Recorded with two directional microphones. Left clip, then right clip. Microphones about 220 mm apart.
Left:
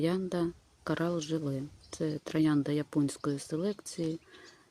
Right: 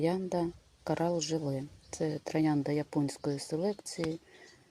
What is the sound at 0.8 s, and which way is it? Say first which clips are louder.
Speech: right 1 dB; 10° left (ahead or behind).